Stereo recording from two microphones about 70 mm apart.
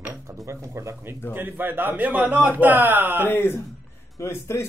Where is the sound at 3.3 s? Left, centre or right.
Left.